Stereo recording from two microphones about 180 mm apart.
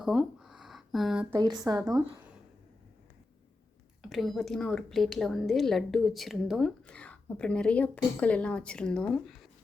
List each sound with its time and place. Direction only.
0.0 s a sound: centre (ahead or behind)
1.4 s speech: 20° right (ahead or behind)
4.0 s a woman's voice: centre (ahead or behind)